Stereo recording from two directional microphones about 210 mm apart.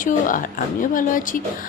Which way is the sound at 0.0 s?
40° left (ahead or behind).